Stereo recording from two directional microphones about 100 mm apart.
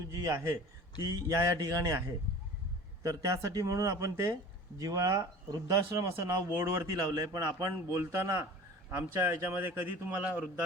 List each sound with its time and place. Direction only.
0.1 s a man's voice: 35° right (ahead or behind)
3.0 s a man's voice: 35° right (ahead or behind); by 10.5 s 15° right (ahead or behind)